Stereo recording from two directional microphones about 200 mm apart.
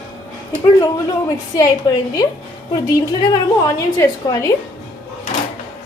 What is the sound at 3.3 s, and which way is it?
A woman's voice, 15° left (ahead or behind).